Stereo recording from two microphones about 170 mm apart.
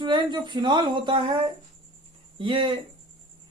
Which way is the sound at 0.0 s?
25° right (ahead or behind).